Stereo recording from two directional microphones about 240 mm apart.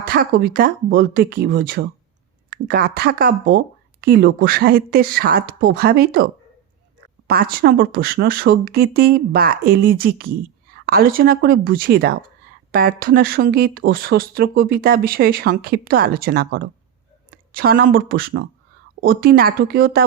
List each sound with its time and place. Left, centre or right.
0.1 s speech: right